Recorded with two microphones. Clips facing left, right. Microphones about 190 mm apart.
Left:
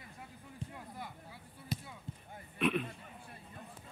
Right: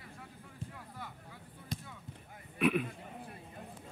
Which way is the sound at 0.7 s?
15° left (ahead or behind).